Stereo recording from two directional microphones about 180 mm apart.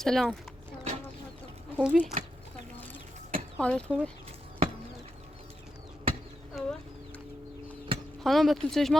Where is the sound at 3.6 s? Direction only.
5° left (ahead or behind).